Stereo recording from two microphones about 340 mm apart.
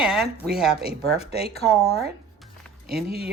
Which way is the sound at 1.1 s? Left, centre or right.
Centre.